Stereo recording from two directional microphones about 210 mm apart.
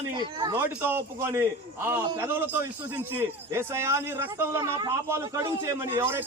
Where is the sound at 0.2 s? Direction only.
20° right (ahead or behind).